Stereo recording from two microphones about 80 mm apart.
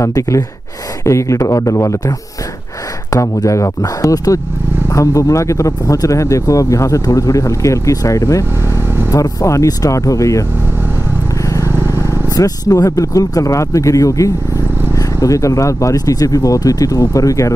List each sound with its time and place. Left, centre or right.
0.0 s a man's voice: left
8.7 s vehicle: right
9.1 s speech: left
11.4 s vehicle: left
12.3 s speech: left